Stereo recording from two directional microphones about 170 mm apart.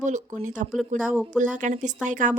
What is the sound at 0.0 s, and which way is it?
A woman's voice, 45° right (ahead or behind).